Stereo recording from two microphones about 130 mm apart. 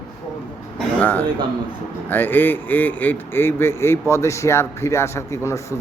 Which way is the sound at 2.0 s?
15° left (ahead or behind).